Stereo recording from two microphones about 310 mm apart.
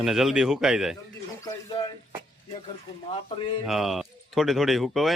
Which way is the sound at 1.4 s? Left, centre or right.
Centre.